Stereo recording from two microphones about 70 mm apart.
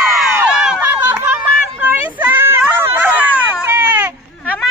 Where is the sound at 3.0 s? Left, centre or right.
Centre.